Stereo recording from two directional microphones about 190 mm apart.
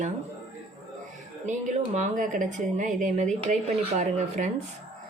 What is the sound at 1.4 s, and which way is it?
Speech, 40° right (ahead or behind).